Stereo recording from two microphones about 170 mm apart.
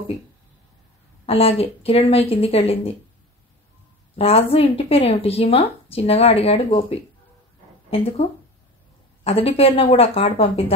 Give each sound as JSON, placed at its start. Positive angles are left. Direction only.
{"t": 1.2, "sound": "speech", "side_deg": 35}
{"t": 4.2, "sound": "speech", "side_deg": 35}